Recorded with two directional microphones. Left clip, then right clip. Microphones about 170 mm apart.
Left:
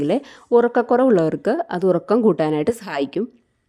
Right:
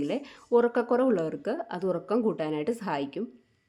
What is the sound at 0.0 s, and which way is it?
Speech, 55° left (ahead or behind).